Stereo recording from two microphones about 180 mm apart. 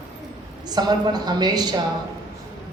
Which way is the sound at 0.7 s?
25° right (ahead or behind).